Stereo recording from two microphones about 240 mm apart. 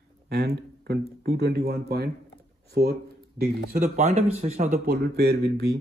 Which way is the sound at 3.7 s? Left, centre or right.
Right.